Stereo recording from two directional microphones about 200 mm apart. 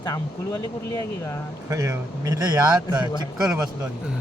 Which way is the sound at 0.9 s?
15° left (ahead or behind).